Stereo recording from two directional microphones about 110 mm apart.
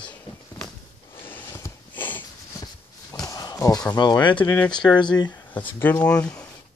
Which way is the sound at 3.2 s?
35° left (ahead or behind).